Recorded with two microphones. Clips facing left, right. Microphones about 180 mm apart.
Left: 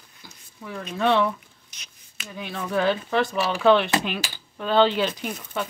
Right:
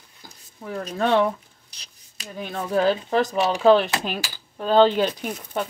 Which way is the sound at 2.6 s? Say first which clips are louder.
Right 2 dB; 40° right (ahead or behind).